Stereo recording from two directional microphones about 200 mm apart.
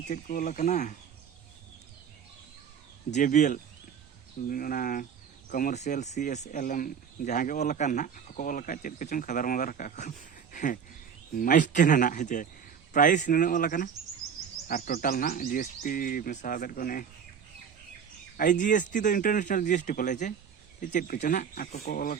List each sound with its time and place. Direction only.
0.1 s speech: 40° left (ahead or behind)
3.1 s speech: 40° left (ahead or behind)
18.3 s speech: 40° left (ahead or behind)